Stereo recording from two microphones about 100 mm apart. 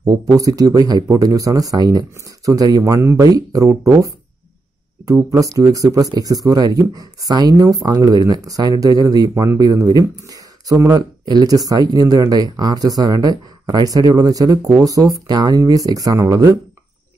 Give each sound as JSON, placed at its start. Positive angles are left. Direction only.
{"t": 0.0, "sound": "speech", "side_deg": -40}
{"t": 5.0, "sound": "speech", "side_deg": -35}
{"t": 9.3, "sound": "speech", "side_deg": -25}
{"t": 9.6, "sound": "speech", "side_deg": -40}